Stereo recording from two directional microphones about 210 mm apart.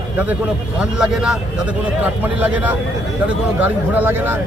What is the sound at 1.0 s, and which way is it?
Speech, 5° right (ahead or behind).